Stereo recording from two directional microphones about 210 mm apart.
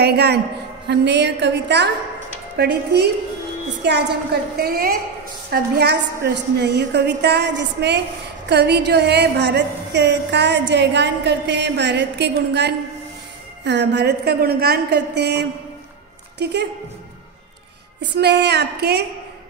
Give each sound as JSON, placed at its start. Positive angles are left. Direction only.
{"t": 0.0, "sound": "a woman's voice", "side_deg": -50}
{"t": 18.1, "sound": "a woman's voice", "side_deg": -55}